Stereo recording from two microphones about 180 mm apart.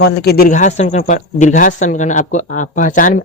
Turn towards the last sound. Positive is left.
turn(degrees=45)  # may be behind; listen again after turning